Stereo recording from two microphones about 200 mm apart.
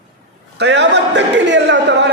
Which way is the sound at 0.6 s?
60° right (ahead or behind).